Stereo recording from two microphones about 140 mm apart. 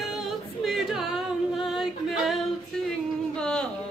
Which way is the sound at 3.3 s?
5° left (ahead or behind).